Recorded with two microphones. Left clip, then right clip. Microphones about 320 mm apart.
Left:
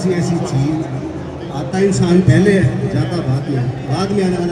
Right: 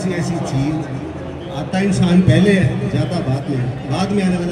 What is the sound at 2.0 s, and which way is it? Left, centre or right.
Speech, centre.